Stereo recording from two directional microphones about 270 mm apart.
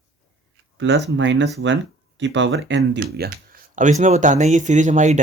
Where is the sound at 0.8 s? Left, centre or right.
Right.